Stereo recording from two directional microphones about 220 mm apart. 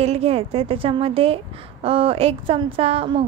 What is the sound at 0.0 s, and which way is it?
A woman's voice, 30° right (ahead or behind).